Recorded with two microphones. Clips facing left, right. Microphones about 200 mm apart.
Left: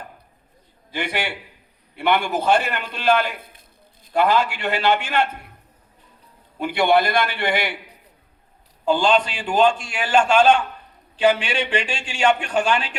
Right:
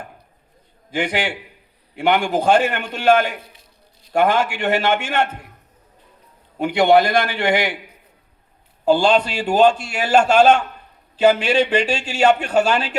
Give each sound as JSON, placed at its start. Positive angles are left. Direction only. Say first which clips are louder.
{"t": 0.9, "sound": "a man's voice", "louder": "right 4 dB", "side_deg": -50}
{"t": 6.8, "sound": "a man's voice", "louder": "right 3 dB", "side_deg": -50}
{"t": 8.8, "sound": "a man's voice", "louder": "right 3 dB", "side_deg": -40}